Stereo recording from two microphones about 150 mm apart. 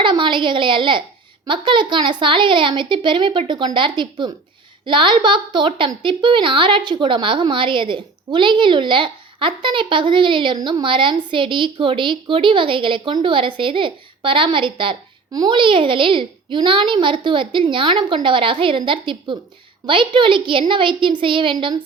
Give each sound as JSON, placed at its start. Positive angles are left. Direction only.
{"t": 0.0, "sound": "a woman's voice", "side_deg": -35}